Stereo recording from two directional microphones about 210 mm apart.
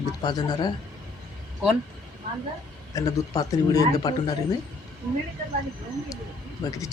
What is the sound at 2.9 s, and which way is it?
Speech, 15° left (ahead or behind).